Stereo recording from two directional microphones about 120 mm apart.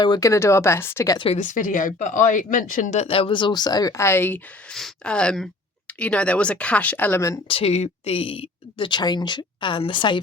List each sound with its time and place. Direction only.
0.0 s speech: 40° left (ahead or behind)
0.3 s speech: 25° left (ahead or behind)
1.3 s speech: 90° left; by 4.4 s 20° left (ahead or behind)
4.7 s speech: 5° left (ahead or behind); by 7.3 s 20° left (ahead or behind)
7.4 s speech: 55° left (ahead or behind)